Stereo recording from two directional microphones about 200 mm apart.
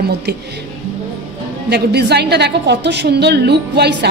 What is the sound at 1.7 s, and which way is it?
A woman's voice, 55° right (ahead or behind).